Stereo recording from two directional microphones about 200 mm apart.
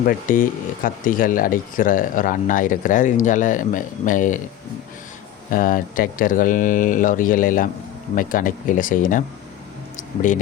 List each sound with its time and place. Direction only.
0.0 s speech: 45° left (ahead or behind)
5.5 s speech: 45° left (ahead or behind)